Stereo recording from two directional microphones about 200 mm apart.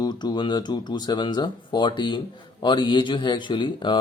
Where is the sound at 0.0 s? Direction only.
20° left (ahead or behind).